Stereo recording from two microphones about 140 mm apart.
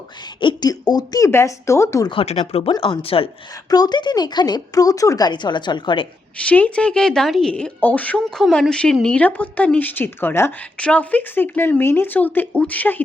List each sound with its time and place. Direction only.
0.3 s speech: 30° left (ahead or behind)
2.0 s speech: 45° left (ahead or behind)
3.7 s speech: 30° left (ahead or behind)
6.3 s speech: 10° left (ahead or behind)